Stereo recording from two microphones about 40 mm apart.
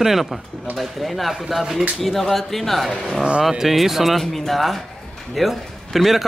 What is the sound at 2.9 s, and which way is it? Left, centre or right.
Speech, centre.